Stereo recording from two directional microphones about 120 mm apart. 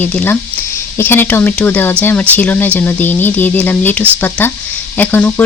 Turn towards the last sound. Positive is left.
turn(degrees=15)  # may be behind; listen again after turning